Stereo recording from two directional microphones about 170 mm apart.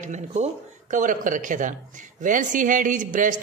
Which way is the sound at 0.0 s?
45° right (ahead or behind).